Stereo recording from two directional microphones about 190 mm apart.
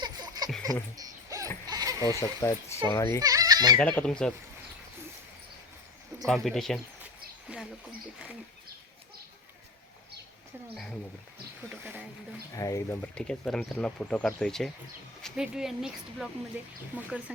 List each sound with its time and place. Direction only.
0.0 s a sound: 20° right (ahead or behind)
1.6 s sheep: 20° right (ahead or behind)
2.4 s speech: 15° left (ahead or behind)
3.2 s speech: 20° right (ahead or behind)
3.8 s speech: 5° left (ahead or behind)
6.2 s speech: centre (ahead or behind)
11.7 s speech: 10° right (ahead or behind)
12.5 s speech: 15° left (ahead or behind); by 17.3 s 5° right (ahead or behind)